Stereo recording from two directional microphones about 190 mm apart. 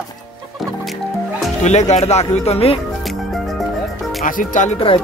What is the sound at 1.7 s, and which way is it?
Speech, 35° left (ahead or behind).